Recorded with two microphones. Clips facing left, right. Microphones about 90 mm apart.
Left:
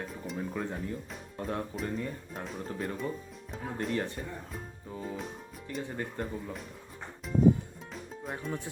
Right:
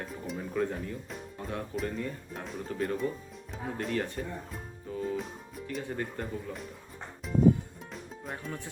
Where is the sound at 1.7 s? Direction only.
25° left (ahead or behind).